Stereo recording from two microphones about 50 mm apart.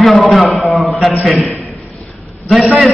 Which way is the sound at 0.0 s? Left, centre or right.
Centre.